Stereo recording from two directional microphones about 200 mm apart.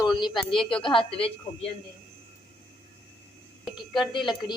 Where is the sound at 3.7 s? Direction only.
Centre (ahead or behind).